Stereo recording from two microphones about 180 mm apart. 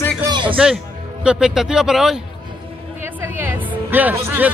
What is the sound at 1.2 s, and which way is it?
Speech, 5° right (ahead or behind).